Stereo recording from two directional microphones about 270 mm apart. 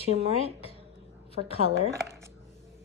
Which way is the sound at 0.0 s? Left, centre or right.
Right.